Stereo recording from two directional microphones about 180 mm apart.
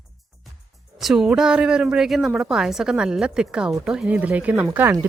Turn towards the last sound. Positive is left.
turn(degrees=-10)  # may be behind; listen again after turning